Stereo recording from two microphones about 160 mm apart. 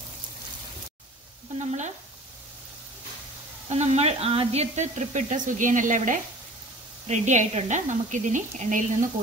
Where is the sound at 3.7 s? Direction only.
45° right (ahead or behind).